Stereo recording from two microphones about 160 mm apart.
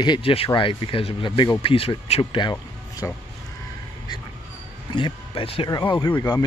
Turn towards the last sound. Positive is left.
turn(degrees=20)  # may be behind; listen again after turning